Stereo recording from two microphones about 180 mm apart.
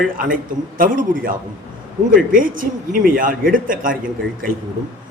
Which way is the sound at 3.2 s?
50° right (ahead or behind).